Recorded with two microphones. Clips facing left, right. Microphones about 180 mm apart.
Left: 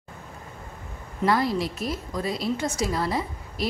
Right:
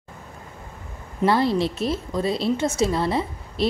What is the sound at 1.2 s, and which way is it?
A woman's voice, 30° right (ahead or behind).